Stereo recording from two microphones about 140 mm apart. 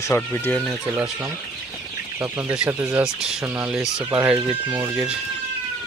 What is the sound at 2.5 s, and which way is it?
Speech, 10° right (ahead or behind).